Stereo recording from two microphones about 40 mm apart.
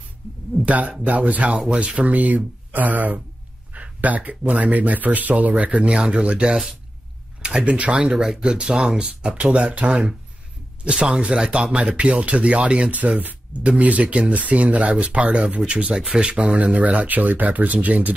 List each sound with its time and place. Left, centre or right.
0.7 s speech: right
1.7 s speech: right
2.0 s speech: right
6.5 s speech: centre
7.4 s speech: right
8.0 s speech: centre; by 18.1 s right